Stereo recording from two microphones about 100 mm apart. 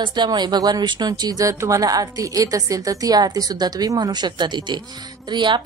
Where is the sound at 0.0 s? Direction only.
50° right (ahead or behind).